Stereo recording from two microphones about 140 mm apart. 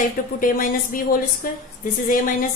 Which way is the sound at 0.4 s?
85° left.